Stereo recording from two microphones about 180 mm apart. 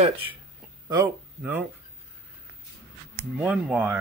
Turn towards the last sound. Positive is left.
turn(degrees=-10)  # may be behind; listen again after turning